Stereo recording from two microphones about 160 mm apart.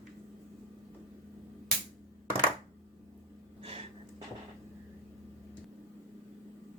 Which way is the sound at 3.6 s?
35° right (ahead or behind).